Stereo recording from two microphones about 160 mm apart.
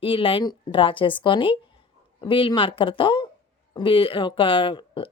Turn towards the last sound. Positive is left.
turn(degrees=30)  # may be behind; listen again after turning